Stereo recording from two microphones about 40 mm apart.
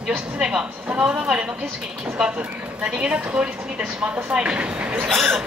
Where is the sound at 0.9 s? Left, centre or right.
Right.